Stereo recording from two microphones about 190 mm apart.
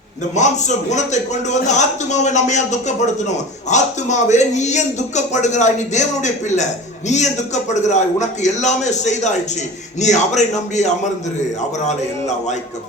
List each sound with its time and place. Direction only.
0.3 s a man's voice: 40° left (ahead or behind)